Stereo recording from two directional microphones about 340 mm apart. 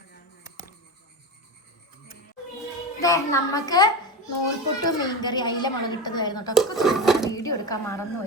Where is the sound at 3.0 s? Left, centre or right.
Centre.